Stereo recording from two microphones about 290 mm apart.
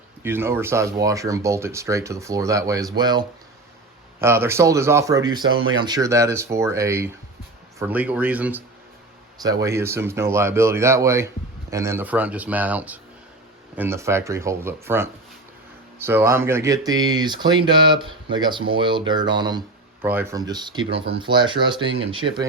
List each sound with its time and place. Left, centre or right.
0.2 s speech: centre
5.5 s speech: right
5.8 s speech: centre